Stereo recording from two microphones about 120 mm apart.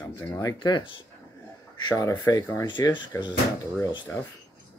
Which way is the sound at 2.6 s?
40° left (ahead or behind).